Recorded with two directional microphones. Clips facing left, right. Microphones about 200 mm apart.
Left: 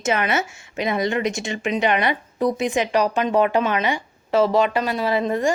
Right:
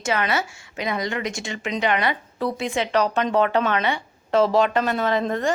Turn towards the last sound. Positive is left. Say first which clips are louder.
# left 1 dB
turn(degrees=10)  # may be behind; listen again after turning